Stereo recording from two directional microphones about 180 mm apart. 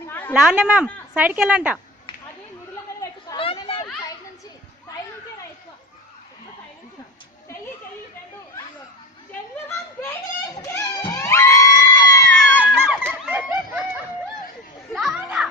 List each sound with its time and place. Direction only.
0.1 s a sound: 10° left (ahead or behind)
0.3 s speech: 5° right (ahead or behind)
3.0 s chatter: 20° left (ahead or behind)
3.4 s a sound: 30° left (ahead or behind)
10.6 s music: 15° left (ahead or behind)
12.5 s crowd: 10° right (ahead or behind)
13.2 s chicken: 10° right (ahead or behind)
14.9 s children playing: 5° right (ahead or behind)